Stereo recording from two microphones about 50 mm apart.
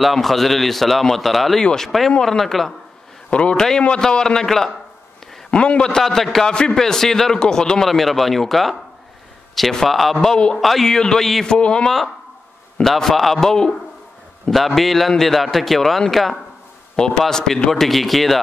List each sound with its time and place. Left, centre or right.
0.0 s a man's voice: centre
3.3 s a man's voice: left
5.5 s a man's voice: left
6.0 s a man's voice: centre
10.2 s a man's voice: centre
10.6 s a man's voice: centre
11.5 s a man's voice: centre
12.8 s a man's voice: centre
14.8 s a man's voice: centre